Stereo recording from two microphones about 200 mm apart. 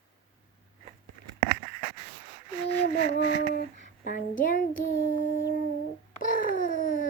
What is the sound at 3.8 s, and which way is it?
Speech, 40° left (ahead or behind).